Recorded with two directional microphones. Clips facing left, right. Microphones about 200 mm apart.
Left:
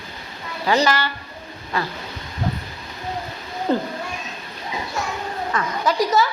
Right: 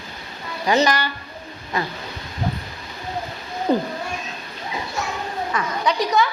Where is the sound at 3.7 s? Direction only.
15° right (ahead or behind).